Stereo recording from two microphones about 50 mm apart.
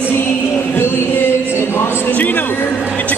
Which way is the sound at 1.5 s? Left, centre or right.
Left.